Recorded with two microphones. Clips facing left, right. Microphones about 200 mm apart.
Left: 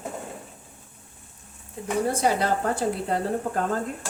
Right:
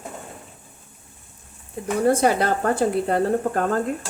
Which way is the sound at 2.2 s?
60° right (ahead or behind).